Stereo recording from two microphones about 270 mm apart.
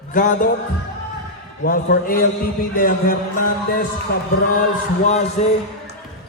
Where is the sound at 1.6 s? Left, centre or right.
Left.